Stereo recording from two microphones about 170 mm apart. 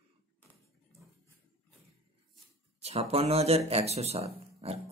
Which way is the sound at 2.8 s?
35° right (ahead or behind).